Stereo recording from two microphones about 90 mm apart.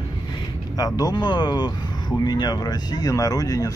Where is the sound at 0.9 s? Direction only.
50° left (ahead or behind).